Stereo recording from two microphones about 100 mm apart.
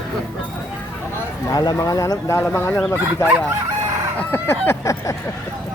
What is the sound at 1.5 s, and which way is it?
Speech, 40° left (ahead or behind).